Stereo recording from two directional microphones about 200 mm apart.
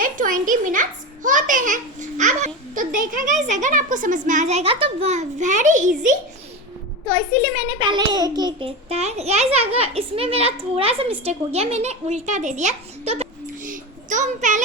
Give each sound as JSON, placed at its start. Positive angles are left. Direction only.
{"t": 0.0, "sound": "a child's voice", "side_deg": -40}
{"t": 7.1, "sound": "a child's voice", "side_deg": -25}
{"t": 13.7, "sound": "a sound", "side_deg": -40}